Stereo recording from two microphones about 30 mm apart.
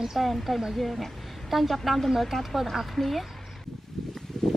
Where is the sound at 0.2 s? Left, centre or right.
Centre.